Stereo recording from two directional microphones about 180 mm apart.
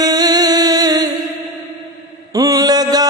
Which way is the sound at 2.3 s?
20° right (ahead or behind).